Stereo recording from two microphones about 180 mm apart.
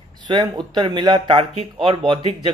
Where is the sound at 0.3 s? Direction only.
25° right (ahead or behind).